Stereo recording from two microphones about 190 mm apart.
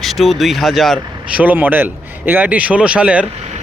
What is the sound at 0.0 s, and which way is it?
Speech, centre (ahead or behind).